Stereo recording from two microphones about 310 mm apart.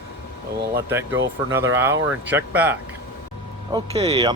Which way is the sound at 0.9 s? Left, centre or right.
Centre.